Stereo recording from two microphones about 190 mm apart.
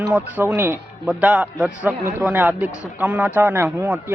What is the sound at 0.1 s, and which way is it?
A man's voice, 10° right (ahead or behind).